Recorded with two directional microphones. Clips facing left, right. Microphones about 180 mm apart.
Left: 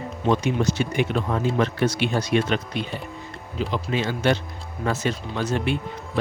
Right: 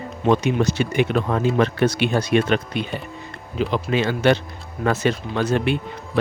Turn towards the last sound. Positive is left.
turn(degrees=-65)  # may be behind; listen again after turning